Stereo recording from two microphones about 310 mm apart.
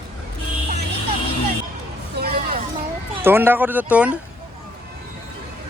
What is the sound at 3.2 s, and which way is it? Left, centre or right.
Speech, centre.